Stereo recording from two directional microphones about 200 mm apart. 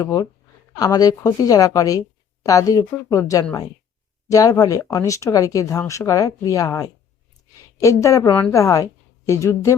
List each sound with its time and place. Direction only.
0.0 s speech: 20° left (ahead or behind)